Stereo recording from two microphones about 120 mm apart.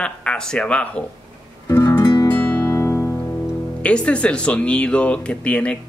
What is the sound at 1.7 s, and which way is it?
Music, 20° left (ahead or behind).